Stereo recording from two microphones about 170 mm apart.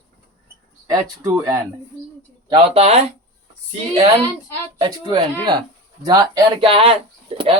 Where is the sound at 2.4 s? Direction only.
35° right (ahead or behind).